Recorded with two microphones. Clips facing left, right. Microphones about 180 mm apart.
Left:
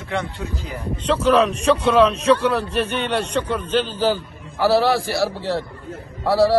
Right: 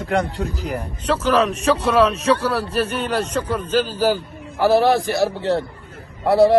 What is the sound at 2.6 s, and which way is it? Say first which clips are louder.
Speech: right 1 dB; 35° right (ahead or behind).